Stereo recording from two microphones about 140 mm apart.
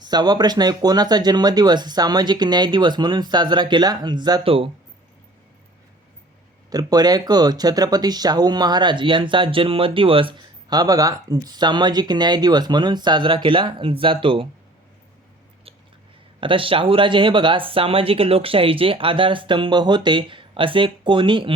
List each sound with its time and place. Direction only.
0.1 s speech: 30° right (ahead or behind)
6.7 s speech: 25° right (ahead or behind)
16.4 s speech: 40° right (ahead or behind)